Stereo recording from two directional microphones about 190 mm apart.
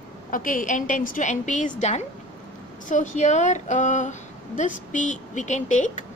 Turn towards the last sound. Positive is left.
turn(degrees=40)  # may be behind; listen again after turning